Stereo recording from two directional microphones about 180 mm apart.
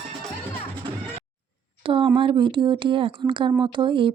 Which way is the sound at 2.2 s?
25° right (ahead or behind).